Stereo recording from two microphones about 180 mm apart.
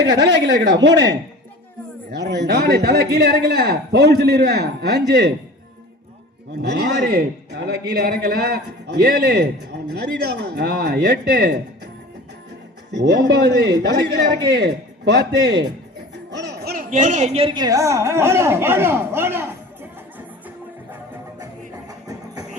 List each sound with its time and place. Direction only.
0.1 s speech: 75° right (ahead or behind)
2.1 s a man's voice: 70° right (ahead or behind)
6.6 s a man's voice: 65° right (ahead or behind)
12.9 s a woman's voice: 70° right (ahead or behind); by 19.5 s 10° right (ahead or behind)
21.8 s music: 20° right (ahead or behind)